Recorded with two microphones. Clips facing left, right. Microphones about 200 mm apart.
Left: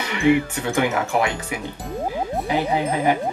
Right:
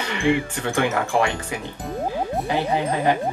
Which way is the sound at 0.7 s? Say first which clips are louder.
Even; 10° left (ahead or behind).